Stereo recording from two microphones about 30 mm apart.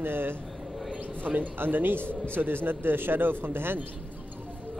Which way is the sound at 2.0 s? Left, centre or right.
Left.